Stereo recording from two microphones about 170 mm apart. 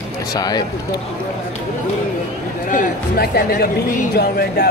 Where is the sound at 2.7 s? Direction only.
60° left (ahead or behind).